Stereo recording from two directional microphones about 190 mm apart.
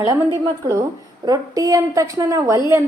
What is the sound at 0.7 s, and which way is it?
A woman's voice, 20° right (ahead or behind).